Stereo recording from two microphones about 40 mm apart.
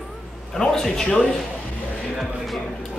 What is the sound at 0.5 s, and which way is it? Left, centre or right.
Speech, centre.